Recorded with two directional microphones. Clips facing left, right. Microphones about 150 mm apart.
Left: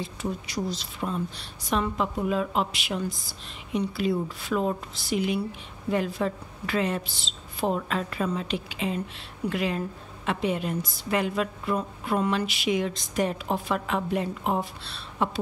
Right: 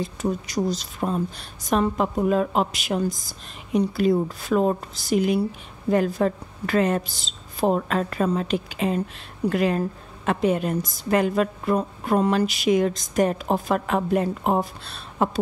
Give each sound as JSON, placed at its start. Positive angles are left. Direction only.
{"t": 0.0, "sound": "a woman's voice", "side_deg": -45}